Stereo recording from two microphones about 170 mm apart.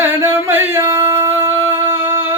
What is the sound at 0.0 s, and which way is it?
Singing, 15° right (ahead or behind).